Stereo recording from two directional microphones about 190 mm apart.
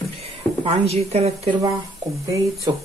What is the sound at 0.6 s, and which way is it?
Speech, 30° right (ahead or behind).